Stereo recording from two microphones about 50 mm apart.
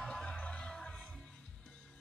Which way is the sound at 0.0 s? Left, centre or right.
Centre.